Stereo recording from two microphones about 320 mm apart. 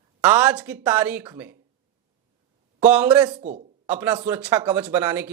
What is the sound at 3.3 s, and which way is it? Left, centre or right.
Speech, right.